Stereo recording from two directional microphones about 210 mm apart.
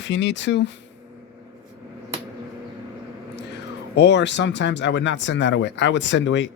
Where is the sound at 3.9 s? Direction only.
55° left (ahead or behind).